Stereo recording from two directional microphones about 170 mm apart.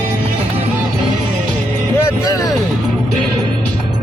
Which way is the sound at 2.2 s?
20° left (ahead or behind).